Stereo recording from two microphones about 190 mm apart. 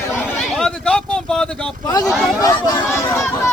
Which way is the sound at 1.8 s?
20° left (ahead or behind).